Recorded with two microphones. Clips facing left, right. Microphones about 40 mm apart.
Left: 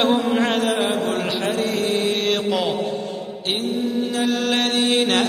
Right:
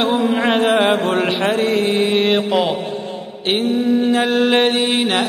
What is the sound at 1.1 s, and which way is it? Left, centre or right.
Mantra, right.